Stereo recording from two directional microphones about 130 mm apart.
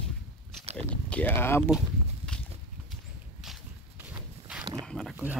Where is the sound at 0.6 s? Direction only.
55° right (ahead or behind).